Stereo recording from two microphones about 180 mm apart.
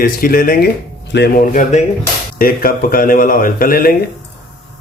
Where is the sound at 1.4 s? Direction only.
45° left (ahead or behind).